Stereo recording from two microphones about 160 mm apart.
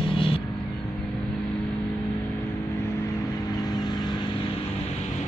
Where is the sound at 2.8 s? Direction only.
20° left (ahead or behind).